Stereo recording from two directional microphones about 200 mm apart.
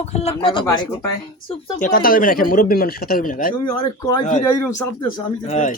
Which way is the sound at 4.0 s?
20° left (ahead or behind).